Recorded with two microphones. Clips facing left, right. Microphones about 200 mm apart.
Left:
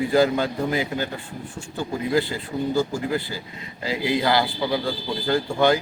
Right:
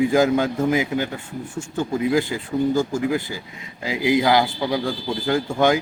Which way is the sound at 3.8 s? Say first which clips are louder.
Right 4 dB; 15° right (ahead or behind).